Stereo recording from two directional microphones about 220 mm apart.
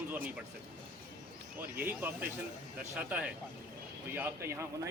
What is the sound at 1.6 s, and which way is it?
Speech, 10° right (ahead or behind).